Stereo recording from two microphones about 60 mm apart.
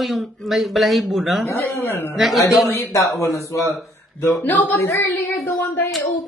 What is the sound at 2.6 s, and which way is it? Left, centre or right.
Speech, left.